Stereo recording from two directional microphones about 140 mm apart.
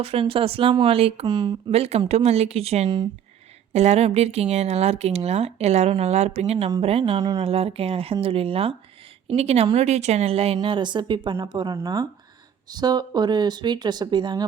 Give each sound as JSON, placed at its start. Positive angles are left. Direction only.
{"t": 0.0, "sound": "speech", "side_deg": -40}
{"t": 1.3, "sound": "speech", "side_deg": -30}
{"t": 1.7, "sound": "speech", "side_deg": -45}